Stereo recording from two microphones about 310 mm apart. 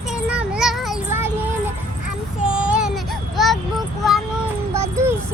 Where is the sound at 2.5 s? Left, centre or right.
Centre.